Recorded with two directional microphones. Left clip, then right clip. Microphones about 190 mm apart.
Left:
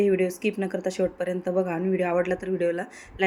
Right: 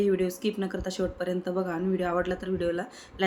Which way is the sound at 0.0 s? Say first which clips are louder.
Left 3 dB; 15° left (ahead or behind).